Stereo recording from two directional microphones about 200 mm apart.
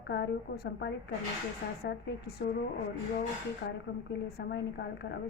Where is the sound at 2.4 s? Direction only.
55° left (ahead or behind).